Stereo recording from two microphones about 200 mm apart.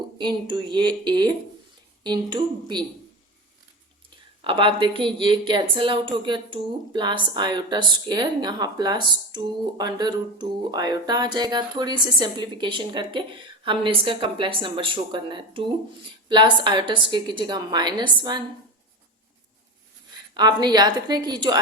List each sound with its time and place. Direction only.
0.2 s a woman's voice: 20° right (ahead or behind)
4.4 s a woman's voice: 25° right (ahead or behind)
20.3 s a woman's voice: 20° right (ahead or behind)